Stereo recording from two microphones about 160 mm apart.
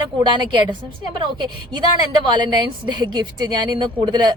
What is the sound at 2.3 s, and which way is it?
A woman's voice, 30° right (ahead or behind).